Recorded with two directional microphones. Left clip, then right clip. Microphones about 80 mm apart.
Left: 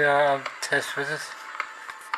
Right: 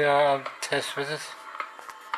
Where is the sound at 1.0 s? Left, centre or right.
Right.